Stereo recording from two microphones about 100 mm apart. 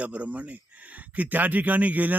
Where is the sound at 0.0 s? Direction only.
15° right (ahead or behind).